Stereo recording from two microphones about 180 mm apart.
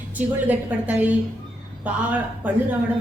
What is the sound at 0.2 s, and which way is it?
Speech, 10° right (ahead or behind).